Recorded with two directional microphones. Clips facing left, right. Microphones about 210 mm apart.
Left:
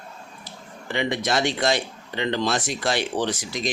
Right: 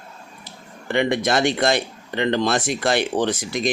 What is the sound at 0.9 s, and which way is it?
Speech, 55° right (ahead or behind).